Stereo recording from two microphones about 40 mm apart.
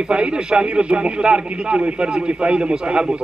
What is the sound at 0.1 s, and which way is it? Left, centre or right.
A man's voice, right.